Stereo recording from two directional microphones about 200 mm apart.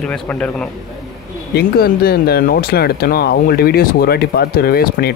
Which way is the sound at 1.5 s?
50° left (ahead or behind).